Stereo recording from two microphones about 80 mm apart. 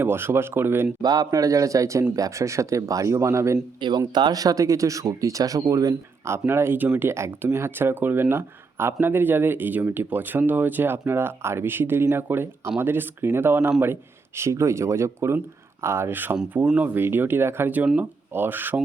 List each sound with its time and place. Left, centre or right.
0.0 s speech: right
1.0 s speech: right
3.8 s speech: right
5.9 s speech: right